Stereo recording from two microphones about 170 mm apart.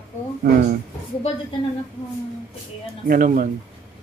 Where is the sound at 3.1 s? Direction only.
50° right (ahead or behind).